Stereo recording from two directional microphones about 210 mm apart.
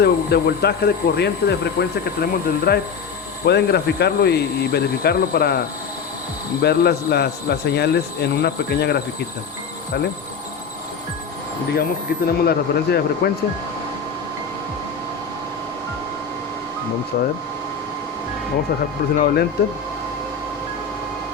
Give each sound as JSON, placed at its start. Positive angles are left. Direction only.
{"t": 0.0, "sound": "speech", "side_deg": 50}
{"t": 11.7, "sound": "speech", "side_deg": 45}
{"t": 17.1, "sound": "speech", "side_deg": 45}
{"t": 19.2, "sound": "speech", "side_deg": 50}